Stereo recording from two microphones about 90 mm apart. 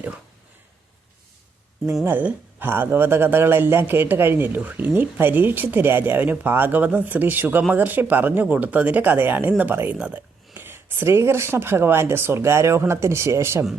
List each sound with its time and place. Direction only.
2.0 s speech: 20° right (ahead or behind)